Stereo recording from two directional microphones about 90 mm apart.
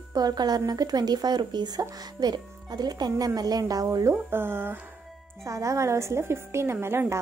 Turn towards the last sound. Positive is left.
turn(degrees=-25)  # may be behind; listen again after turning